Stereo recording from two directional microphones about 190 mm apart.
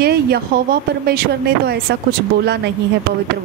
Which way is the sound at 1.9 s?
60° right (ahead or behind).